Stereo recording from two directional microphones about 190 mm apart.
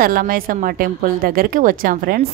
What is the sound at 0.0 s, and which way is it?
A woman's voice, 50° right (ahead or behind).